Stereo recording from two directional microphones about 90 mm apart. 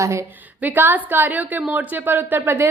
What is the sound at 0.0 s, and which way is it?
Speech, 35° right (ahead or behind).